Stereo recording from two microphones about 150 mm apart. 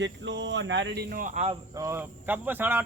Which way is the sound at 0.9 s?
80° right.